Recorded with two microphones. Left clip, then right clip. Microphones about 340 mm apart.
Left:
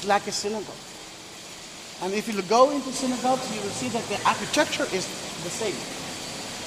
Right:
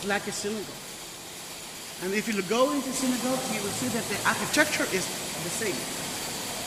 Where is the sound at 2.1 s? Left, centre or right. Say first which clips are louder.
Left 4 dB; centre.